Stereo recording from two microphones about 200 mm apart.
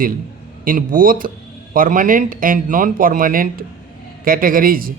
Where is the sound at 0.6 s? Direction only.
45° right (ahead or behind).